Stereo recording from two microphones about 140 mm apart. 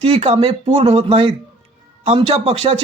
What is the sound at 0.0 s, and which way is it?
Speech, 50° right (ahead or behind).